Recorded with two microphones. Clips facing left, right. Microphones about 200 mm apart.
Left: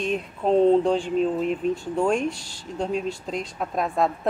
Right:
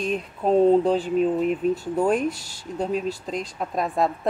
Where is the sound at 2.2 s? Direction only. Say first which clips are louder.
Right 1 dB; 40° right (ahead or behind).